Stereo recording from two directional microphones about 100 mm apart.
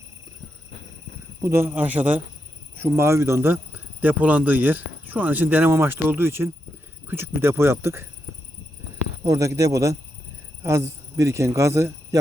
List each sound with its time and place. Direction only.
1.4 s speech: 25° right (ahead or behind)
9.2 s a man's voice: 30° right (ahead or behind)